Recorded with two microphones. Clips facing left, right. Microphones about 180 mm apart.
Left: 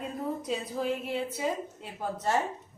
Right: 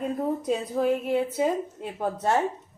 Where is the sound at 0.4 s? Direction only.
50° right (ahead or behind).